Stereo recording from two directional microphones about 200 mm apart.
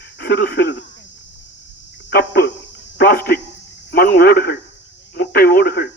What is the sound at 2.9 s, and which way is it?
Cricket, 50° left (ahead or behind).